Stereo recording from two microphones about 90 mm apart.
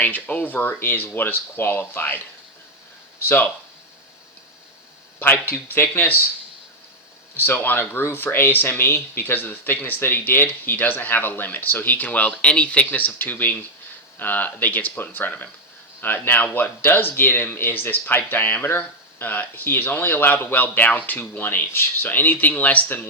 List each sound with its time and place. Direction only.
0.0 s speech: 20° left (ahead or behind)
3.2 s speech: 20° left (ahead or behind)
5.2 s speech: 25° left (ahead or behind)
7.3 s speech: 25° left (ahead or behind)